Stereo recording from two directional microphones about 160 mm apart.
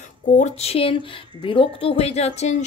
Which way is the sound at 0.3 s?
40° left (ahead or behind).